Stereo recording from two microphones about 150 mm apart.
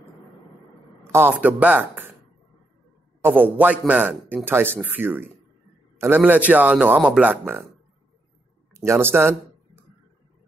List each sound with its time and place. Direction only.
1.1 s a man's voice: 15° right (ahead or behind)
3.2 s a man's voice: 15° right (ahead or behind)
8.7 s a sound: 20° right (ahead or behind)